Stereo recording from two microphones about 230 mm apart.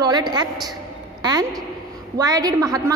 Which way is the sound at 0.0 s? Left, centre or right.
Centre.